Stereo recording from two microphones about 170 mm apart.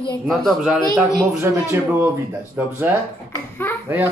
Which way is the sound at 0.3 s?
Centre (ahead or behind).